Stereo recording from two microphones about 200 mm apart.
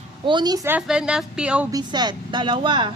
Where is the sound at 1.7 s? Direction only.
20° right (ahead or behind).